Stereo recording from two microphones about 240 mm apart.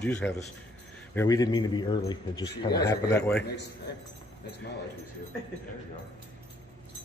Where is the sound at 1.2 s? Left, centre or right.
Centre.